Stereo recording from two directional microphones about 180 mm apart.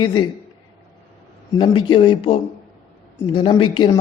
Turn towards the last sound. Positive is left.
turn(degrees=25)  # may be behind; listen again after turning